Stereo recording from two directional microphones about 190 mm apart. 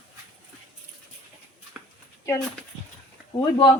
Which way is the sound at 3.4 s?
25° left (ahead or behind).